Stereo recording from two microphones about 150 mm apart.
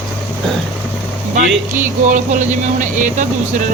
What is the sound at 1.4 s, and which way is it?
Speech, 60° right (ahead or behind).